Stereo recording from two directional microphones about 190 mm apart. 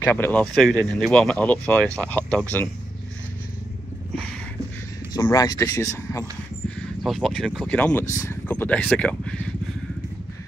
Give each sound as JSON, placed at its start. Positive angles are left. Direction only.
{"t": 0.0, "sound": "speech", "side_deg": 10}
{"t": 5.1, "sound": "speech", "side_deg": 20}
{"t": 7.0, "sound": "speech", "side_deg": 0}